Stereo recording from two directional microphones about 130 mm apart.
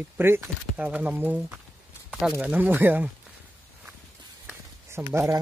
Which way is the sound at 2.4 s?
10° right (ahead or behind).